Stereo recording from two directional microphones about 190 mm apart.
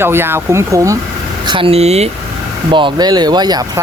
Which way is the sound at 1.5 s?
25° right (ahead or behind).